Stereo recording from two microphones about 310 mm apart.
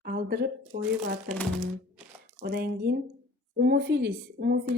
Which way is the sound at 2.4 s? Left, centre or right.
Right.